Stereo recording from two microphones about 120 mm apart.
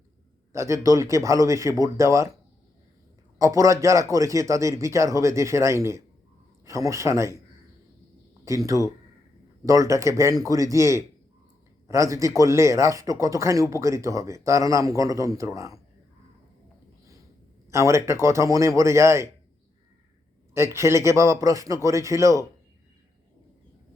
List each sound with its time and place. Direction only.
0.5 s speech: 25° right (ahead or behind)
3.3 s speech: 25° right (ahead or behind)
8.4 s speech: 25° right (ahead or behind)
17.7 s speech: 25° right (ahead or behind)
20.5 s speech: 20° right (ahead or behind)